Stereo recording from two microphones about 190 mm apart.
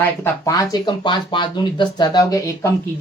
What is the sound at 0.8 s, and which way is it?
Speech, 25° left (ahead or behind).